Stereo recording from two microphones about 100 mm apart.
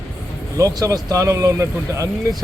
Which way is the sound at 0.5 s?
35° right (ahead or behind).